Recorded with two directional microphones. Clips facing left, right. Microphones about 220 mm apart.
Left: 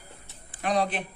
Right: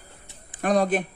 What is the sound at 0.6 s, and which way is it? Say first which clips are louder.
Speech: right 5 dB; 45° right (ahead or behind).